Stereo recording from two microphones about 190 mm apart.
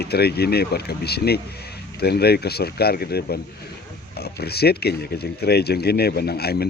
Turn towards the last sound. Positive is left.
turn(degrees=55)  # may be behind; listen again after turning